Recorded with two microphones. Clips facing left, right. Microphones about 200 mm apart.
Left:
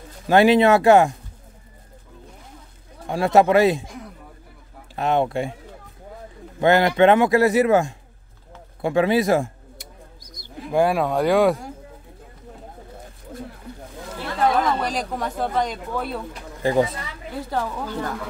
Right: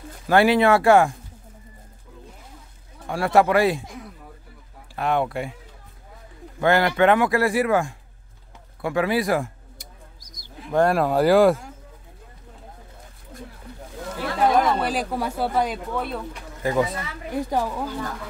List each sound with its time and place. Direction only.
0.3 s speech: 20° left (ahead or behind)
3.1 s speech: 20° left (ahead or behind)
4.9 s speech: 25° left (ahead or behind)
6.6 s speech: 20° left (ahead or behind)
9.8 s bird: 60° left (ahead or behind)
10.7 s speech: 5° left (ahead or behind)
14.6 s speech: 5° right (ahead or behind)
16.6 s speech: 30° left (ahead or behind)
17.3 s speech: 15° right (ahead or behind)